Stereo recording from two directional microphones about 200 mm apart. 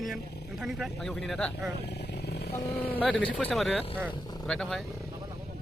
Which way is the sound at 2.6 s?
50° left (ahead or behind).